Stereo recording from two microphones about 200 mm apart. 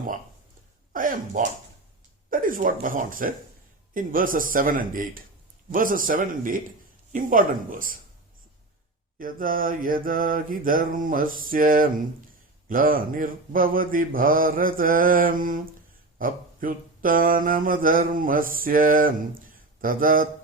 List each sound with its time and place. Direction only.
0.9 s speech: 40° right (ahead or behind)
2.3 s mantra: 45° right (ahead or behind)
9.1 s mantra: 45° right (ahead or behind)